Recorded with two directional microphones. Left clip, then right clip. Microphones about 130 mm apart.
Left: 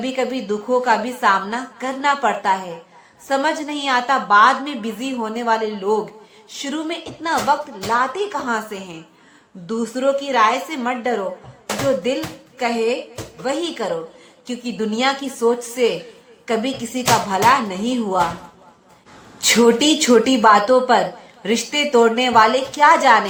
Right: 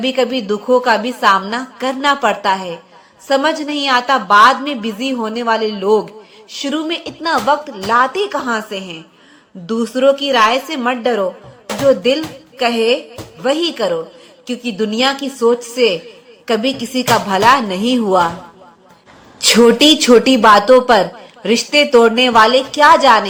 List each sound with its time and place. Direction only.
0.0 s a woman's voice: 25° right (ahead or behind)
19.5 s a woman's voice: 30° right (ahead or behind)